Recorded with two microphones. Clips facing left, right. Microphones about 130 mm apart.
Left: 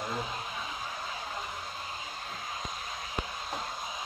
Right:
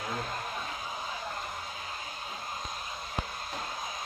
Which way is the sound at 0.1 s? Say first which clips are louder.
Even; 10° left (ahead or behind).